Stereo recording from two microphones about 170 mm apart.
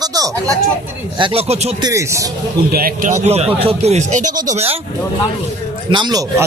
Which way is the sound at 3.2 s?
40° right (ahead or behind).